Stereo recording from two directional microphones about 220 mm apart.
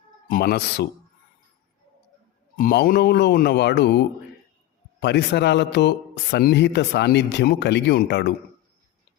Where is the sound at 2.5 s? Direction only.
40° left (ahead or behind).